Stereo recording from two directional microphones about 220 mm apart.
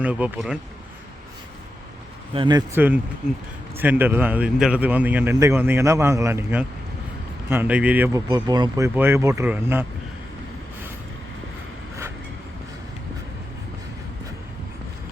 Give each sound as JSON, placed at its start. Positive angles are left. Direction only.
{"t": 0.0, "sound": "speech", "side_deg": -5}
{"t": 2.3, "sound": "speech", "side_deg": -20}